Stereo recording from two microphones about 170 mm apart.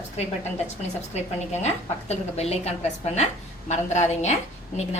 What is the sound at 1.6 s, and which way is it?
A woman's voice, 40° left (ahead or behind).